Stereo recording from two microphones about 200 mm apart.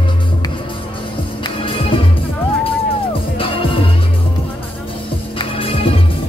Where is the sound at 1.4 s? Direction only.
25° left (ahead or behind).